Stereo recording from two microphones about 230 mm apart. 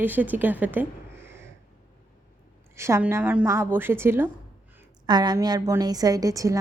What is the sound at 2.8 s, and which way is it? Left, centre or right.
A woman's voice, centre.